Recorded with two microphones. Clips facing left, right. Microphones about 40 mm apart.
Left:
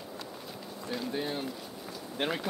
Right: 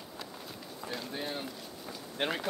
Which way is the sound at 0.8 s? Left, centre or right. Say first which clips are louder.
Left 4 dB; centre.